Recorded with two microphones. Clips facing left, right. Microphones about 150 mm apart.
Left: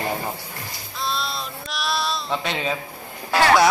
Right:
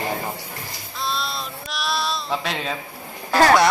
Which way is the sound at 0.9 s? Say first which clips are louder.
Even; centre (ahead or behind).